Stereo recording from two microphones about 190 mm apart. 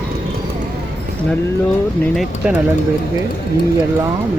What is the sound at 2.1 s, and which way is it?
Speech, centre (ahead or behind).